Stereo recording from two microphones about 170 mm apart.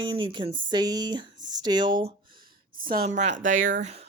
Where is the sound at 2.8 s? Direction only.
55° right (ahead or behind).